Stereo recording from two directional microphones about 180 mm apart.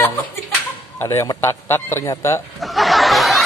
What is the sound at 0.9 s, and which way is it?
A man's voice, 15° left (ahead or behind).